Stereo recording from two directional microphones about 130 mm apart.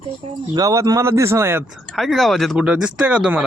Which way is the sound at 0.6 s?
25° right (ahead or behind).